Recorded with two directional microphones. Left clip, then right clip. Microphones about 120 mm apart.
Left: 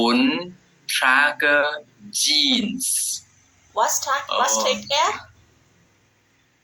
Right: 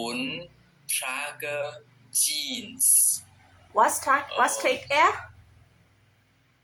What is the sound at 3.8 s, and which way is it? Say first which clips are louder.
Speech: left 1 dB; centre (ahead or behind).